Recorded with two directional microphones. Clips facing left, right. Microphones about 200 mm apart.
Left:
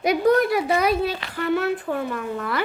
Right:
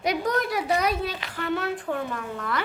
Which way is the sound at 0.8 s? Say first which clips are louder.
Left 5 dB; 10° left (ahead or behind).